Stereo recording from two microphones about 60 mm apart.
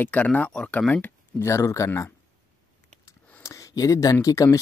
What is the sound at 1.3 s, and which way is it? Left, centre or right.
Speech, left.